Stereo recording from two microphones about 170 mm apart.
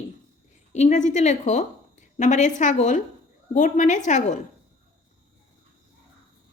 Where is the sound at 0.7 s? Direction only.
45° left (ahead or behind).